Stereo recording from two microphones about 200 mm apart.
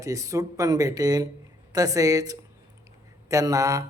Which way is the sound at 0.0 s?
15° right (ahead or behind).